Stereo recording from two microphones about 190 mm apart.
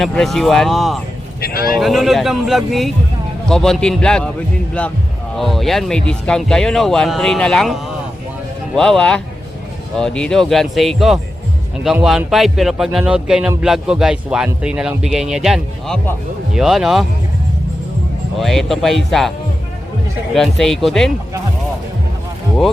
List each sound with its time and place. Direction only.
0.0 s speech: centre (ahead or behind)
1.4 s speech: 55° left (ahead or behind)
1.8 s speech: centre (ahead or behind)
18.3 s speech: centre (ahead or behind)
20.3 s speech: centre (ahead or behind)